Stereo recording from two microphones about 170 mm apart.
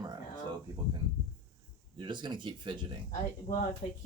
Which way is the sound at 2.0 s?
25° right (ahead or behind).